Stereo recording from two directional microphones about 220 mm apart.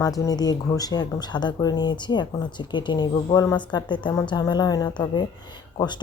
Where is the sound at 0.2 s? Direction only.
15° left (ahead or behind).